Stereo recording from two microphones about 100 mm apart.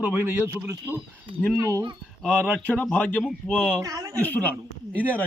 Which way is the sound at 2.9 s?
15° left (ahead or behind).